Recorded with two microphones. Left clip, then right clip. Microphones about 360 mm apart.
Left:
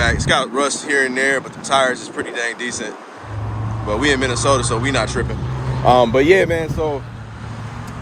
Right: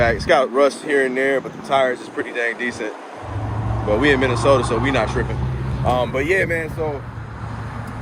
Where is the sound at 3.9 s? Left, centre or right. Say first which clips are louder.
Right 1 dB; centre.